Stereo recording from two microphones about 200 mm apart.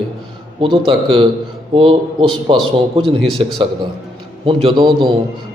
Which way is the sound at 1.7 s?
25° right (ahead or behind).